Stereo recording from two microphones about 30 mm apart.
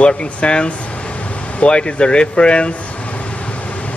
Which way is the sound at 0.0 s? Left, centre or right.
Left.